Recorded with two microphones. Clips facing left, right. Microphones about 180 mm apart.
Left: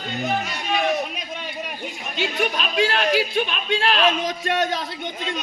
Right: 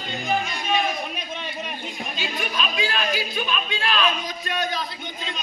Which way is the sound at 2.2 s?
70° left (ahead or behind).